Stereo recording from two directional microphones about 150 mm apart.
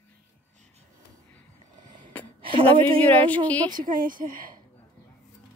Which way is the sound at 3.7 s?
65° right (ahead or behind).